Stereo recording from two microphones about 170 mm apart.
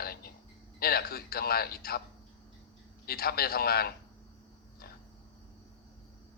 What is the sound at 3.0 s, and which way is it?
Speech, 65° left (ahead or behind).